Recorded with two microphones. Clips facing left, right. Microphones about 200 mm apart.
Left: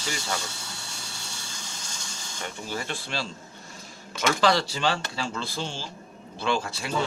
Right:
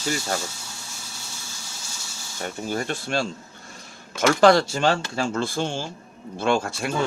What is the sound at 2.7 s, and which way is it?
Speech, 50° right (ahead or behind).